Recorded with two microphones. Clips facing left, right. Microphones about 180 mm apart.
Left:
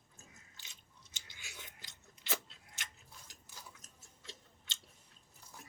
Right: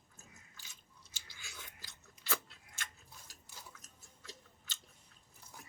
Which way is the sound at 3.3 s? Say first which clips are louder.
Even; 20° left (ahead or behind).